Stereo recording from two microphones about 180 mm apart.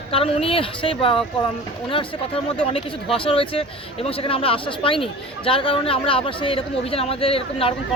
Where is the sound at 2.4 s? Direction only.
30° left (ahead or behind).